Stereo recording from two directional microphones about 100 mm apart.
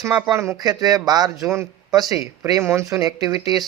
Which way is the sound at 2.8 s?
35° right (ahead or behind).